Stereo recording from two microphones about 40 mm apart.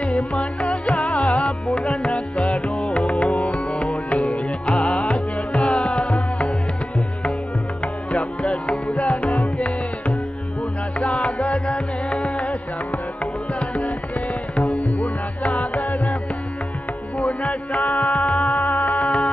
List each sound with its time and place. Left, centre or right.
0.0 s music: left
7.8 s music: left
17.2 s music: left